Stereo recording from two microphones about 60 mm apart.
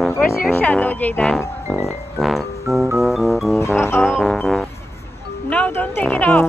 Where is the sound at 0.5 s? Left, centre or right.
Left.